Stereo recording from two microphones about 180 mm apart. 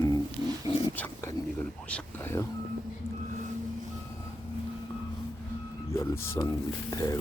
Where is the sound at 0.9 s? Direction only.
15° left (ahead or behind).